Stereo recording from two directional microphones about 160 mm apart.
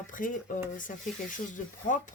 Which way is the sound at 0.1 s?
55° left (ahead or behind).